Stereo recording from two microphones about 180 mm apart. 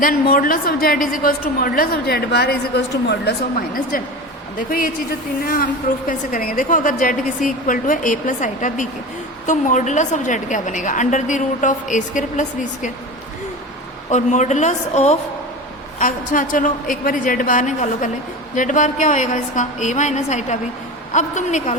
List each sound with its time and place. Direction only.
0.0 s a woman's voice: 50° left (ahead or behind); by 3.3 s 70° left (ahead or behind)
6.1 s a woman's voice: 50° left (ahead or behind)
14.1 s a woman's voice: 40° left (ahead or behind)